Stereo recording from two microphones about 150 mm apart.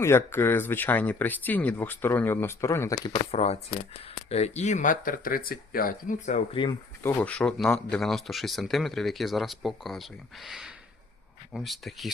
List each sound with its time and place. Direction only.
0.0 s speech: 15° left (ahead or behind)
3.3 s speech: 45° left (ahead or behind)
6.5 s speech: 35° left (ahead or behind)
7.0 s speech: 10° left (ahead or behind)